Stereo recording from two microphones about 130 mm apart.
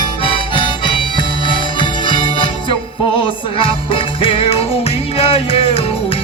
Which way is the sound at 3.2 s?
45° left (ahead or behind).